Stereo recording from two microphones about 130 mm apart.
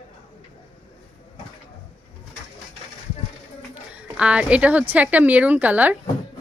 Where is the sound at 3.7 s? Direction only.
10° right (ahead or behind).